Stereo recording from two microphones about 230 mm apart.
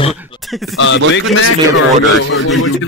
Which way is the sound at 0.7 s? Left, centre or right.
Left.